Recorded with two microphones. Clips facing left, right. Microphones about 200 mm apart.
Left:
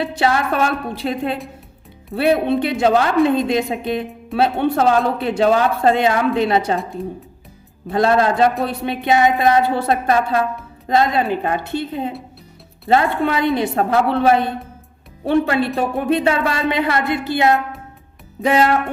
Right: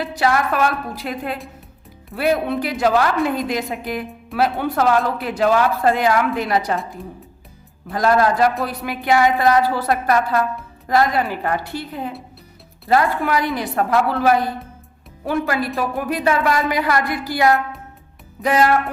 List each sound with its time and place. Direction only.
0.0 s a woman's voice: 25° left (ahead or behind)
7.0 s speech: centre (ahead or behind)
7.9 s a woman's voice: 25° left (ahead or behind)
13.2 s a woman's voice: 25° left (ahead or behind)